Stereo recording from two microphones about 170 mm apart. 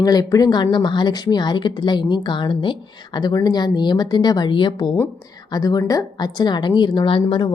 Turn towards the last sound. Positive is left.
turn(degrees=30)  # may be behind; listen again after turning